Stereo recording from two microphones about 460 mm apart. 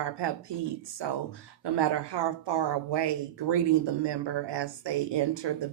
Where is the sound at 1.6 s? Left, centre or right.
Right.